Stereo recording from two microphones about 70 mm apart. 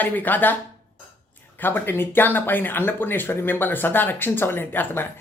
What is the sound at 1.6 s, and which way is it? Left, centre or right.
Speech, left.